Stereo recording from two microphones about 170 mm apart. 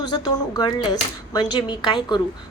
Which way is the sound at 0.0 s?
25° left (ahead or behind).